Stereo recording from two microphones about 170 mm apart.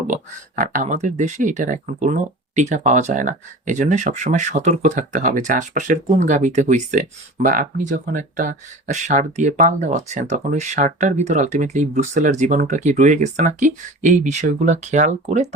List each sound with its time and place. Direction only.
0.1 s speech: 50° right (ahead or behind)